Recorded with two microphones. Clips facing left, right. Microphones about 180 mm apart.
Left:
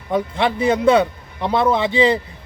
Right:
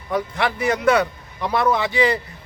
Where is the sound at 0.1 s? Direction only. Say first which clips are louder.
Left 3 dB; 25° left (ahead or behind).